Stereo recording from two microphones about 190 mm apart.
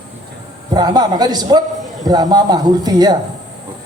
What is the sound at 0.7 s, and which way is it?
A man's voice, 20° right (ahead or behind).